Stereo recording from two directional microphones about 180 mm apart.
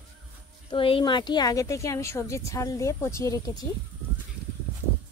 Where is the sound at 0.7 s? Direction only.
30° left (ahead or behind).